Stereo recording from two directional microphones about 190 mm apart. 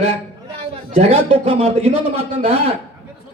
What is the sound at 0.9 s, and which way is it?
A man's voice, 30° right (ahead or behind).